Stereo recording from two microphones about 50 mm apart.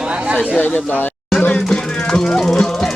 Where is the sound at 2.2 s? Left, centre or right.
Centre.